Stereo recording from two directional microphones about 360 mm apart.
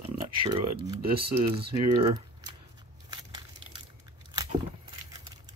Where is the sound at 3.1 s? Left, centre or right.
Centre.